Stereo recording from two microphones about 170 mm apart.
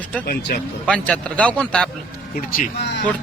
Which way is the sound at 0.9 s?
5° left (ahead or behind).